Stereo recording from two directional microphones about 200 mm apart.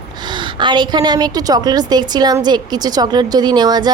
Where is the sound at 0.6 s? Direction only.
20° right (ahead or behind).